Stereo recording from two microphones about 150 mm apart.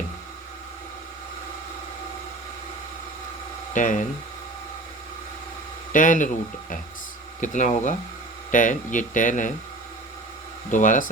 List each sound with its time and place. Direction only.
3.8 s speech: 55° left (ahead or behind)
5.9 s speech: 60° left (ahead or behind)
10.7 s speech: 60° left (ahead or behind)